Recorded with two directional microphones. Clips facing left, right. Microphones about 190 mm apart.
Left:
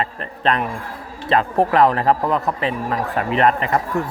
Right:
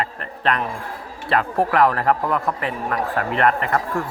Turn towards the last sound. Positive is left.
turn(degrees=20)  # may be behind; listen again after turning